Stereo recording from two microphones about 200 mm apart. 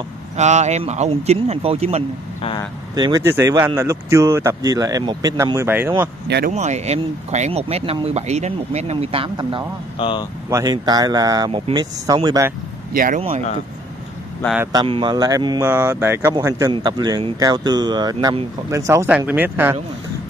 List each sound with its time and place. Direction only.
0.4 s speech: 35° right (ahead or behind)
3.0 s speech: 20° right (ahead or behind)
6.2 s speech: 55° right (ahead or behind)
6.5 s speech: 35° right (ahead or behind)
9.9 s speech: 25° left (ahead or behind)
10.5 s speech: 20° right (ahead or behind)
12.9 s speech: 45° right (ahead or behind)
14.6 s speech: 20° right (ahead or behind)
15.6 s speech: 10° right (ahead or behind)